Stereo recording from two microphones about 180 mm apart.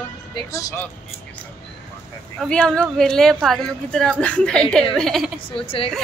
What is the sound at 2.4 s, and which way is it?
Speech, 5° left (ahead or behind).